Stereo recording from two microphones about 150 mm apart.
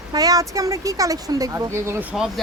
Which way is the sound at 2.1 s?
5° right (ahead or behind).